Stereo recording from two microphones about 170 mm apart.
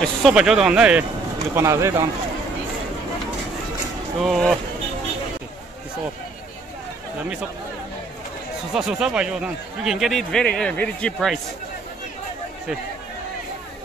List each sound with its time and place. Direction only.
0.0 s speech: centre (ahead or behind)
1.5 s speech: 15° right (ahead or behind)
4.2 s speech: centre (ahead or behind)
8.7 s speech: 5° right (ahead or behind)